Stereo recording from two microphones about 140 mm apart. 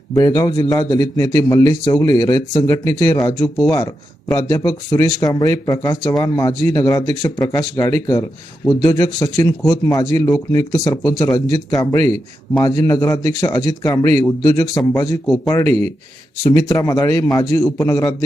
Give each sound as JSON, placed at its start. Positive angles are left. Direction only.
{"t": 0.1, "sound": "a man's voice", "side_deg": 25}